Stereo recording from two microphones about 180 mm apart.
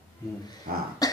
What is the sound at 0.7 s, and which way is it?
Cough, 55° right (ahead or behind).